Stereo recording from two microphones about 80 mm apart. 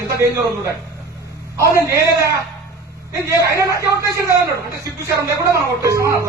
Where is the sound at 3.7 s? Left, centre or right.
Right.